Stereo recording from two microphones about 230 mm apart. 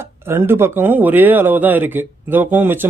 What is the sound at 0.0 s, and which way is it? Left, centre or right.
Speech, centre.